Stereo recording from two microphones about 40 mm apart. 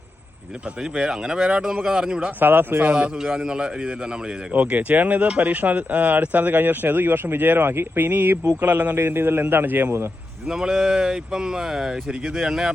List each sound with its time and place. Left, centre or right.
0.8 s speech: centre
2.4 s speech: right
3.2 s a man's voice: centre
4.5 s speech: right
8.6 s speech: right
9.0 s a man's voice: right
10.4 s speech: centre